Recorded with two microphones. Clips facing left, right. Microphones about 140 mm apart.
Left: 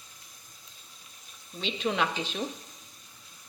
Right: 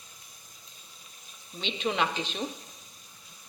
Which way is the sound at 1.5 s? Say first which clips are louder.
Even; centre (ahead or behind).